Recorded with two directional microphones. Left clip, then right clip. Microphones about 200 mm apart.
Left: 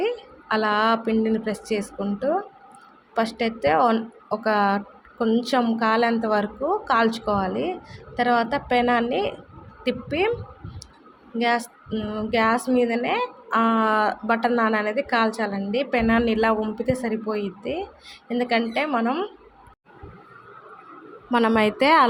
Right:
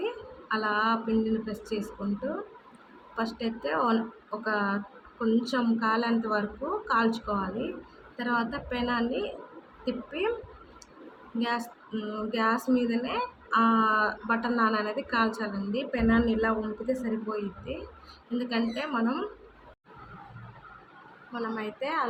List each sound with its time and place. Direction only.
0.0 s a woman's voice: 40° left (ahead or behind)
3.2 s speech: 40° left (ahead or behind)
11.3 s speech: 40° left (ahead or behind)
21.3 s speech: 50° left (ahead or behind)